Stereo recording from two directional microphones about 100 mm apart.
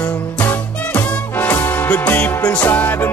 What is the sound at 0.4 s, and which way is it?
Music, 15° left (ahead or behind).